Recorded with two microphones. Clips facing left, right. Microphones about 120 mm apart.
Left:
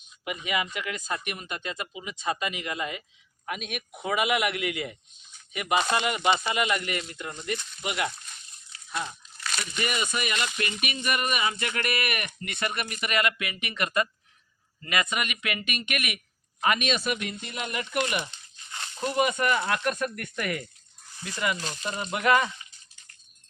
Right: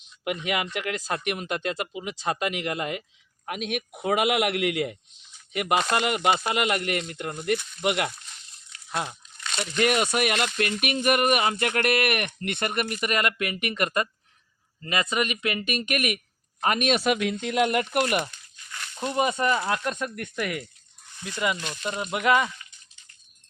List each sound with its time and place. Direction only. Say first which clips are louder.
0.4 s speech: even; 70° right (ahead or behind); by 14.1 s 45° right (ahead or behind)
15.1 s speech: right 5 dB; 35° right (ahead or behind)
16.9 s speech: right 6 dB; 85° right; by 17.8 s 70° right (ahead or behind)
17.9 s speech: right 4 dB; 50° right (ahead or behind)
18.3 s crumpling: even; 25° left (ahead or behind)
18.9 s speech: right 1 dB; 25° right (ahead or behind)